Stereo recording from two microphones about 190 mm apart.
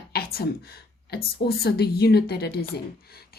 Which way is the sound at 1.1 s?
55° left (ahead or behind).